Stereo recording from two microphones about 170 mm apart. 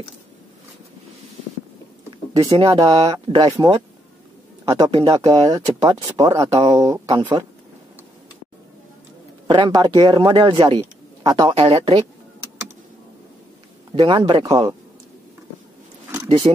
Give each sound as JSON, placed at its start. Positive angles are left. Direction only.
{"t": 2.4, "sound": "speech", "side_deg": -35}
{"t": 3.1, "sound": "speech", "side_deg": -25}
{"t": 9.5, "sound": "speech", "side_deg": -30}
{"t": 13.9, "sound": "speech", "side_deg": -30}
{"t": 16.3, "sound": "speech", "side_deg": -30}